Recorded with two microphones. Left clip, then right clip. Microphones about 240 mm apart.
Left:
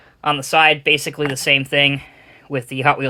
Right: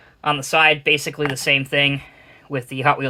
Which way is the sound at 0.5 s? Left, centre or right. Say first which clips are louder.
Left 2 dB; left.